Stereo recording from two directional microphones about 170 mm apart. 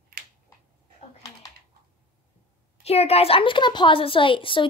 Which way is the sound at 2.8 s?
35° left (ahead or behind).